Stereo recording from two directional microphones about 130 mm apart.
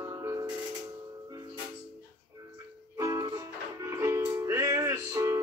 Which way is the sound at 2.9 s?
25° right (ahead or behind).